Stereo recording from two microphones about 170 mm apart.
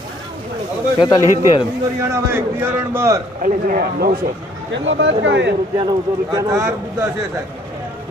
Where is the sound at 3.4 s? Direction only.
60° right (ahead or behind).